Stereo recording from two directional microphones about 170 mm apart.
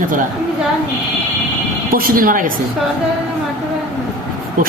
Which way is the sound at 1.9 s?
55° right (ahead or behind).